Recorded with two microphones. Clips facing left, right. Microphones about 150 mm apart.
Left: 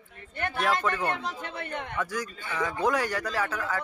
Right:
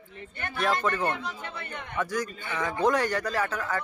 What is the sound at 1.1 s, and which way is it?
Speech, 85° left.